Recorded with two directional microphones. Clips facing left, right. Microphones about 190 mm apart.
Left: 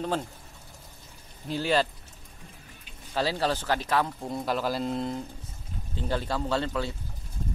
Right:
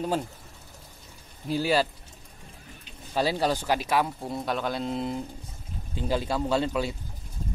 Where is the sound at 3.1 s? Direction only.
15° right (ahead or behind).